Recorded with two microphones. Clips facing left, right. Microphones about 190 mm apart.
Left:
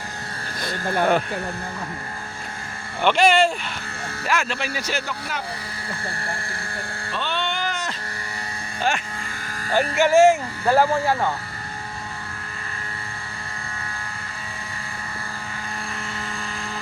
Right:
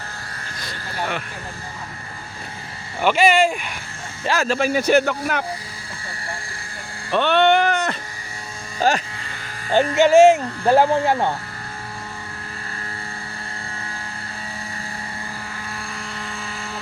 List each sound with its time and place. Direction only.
0.6 s speech: 55° left (ahead or behind)
3.0 s speech: 5° right (ahead or behind)
4.3 s speech: 40° right (ahead or behind); by 5.4 s 60° right (ahead or behind)
7.1 s a sound: 65° right (ahead or behind)
8.8 s speech: 40° right (ahead or behind)
9.7 s speech: 20° right (ahead or behind)
15.9 s vehicle: centre (ahead or behind)